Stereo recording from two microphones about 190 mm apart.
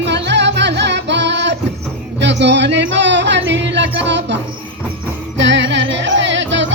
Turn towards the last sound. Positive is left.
turn(degrees=-70)  # may be behind; listen again after turning